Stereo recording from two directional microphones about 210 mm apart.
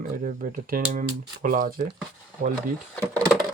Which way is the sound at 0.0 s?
40° right (ahead or behind).